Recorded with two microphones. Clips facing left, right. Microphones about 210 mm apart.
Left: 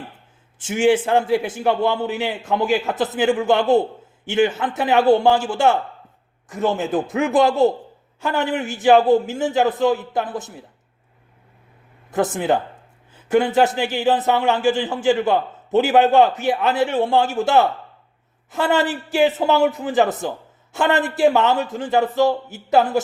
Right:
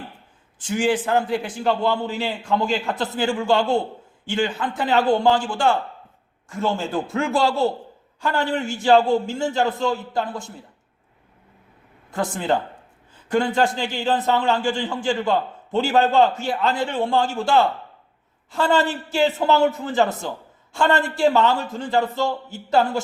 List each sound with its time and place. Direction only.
0.6 s a man's voice: 25° left (ahead or behind)
4.9 s a man's voice: 10° left (ahead or behind)
5.4 s a man's voice: 20° left (ahead or behind)
12.1 s a man's voice: 20° left (ahead or behind)
17.3 s a man's voice: 20° left (ahead or behind)